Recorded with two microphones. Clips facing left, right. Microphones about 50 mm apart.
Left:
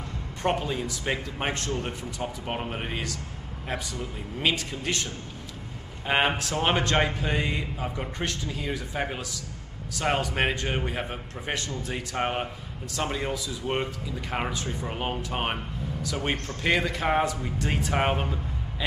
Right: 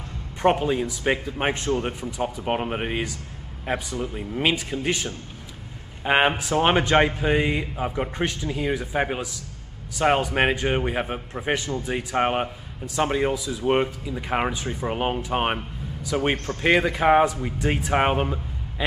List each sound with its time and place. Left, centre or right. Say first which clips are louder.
0.4 s a man's voice: right 7 dB; right